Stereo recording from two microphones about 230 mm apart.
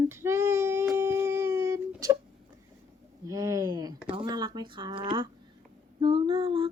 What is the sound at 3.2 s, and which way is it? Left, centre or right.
Speech, centre.